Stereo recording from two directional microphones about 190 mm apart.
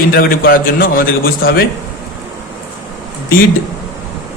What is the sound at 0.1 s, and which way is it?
A man's voice, 50° left (ahead or behind).